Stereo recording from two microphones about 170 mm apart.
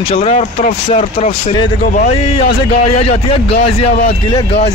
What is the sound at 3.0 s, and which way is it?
Speech, 35° left (ahead or behind).